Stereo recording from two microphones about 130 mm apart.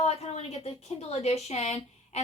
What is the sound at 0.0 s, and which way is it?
A woman's voice, 55° left (ahead or behind).